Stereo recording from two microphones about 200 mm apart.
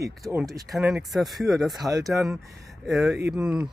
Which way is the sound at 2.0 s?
Centre (ahead or behind).